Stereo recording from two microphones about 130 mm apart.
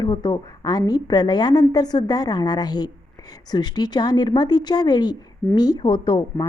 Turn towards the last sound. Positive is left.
turn(degrees=40)  # may be behind; listen again after turning